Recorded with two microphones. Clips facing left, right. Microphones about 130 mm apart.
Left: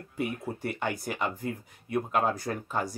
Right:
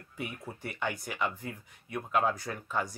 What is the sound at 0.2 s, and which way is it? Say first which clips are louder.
Speech: left 7 dB; 40° left (ahead or behind).